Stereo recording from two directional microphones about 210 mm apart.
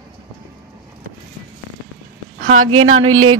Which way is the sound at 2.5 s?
85° right.